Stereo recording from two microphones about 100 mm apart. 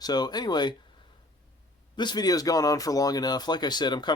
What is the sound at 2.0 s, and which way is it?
Speech, 45° left (ahead or behind).